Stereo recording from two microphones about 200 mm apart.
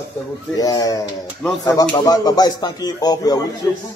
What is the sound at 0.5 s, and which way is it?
Speech, 20° left (ahead or behind).